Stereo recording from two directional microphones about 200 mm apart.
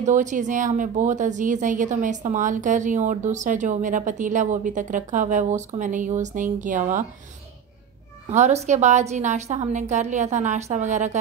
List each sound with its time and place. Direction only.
0.0 s a woman's voice: 40° right (ahead or behind)
8.3 s a woman's voice: 35° right (ahead or behind)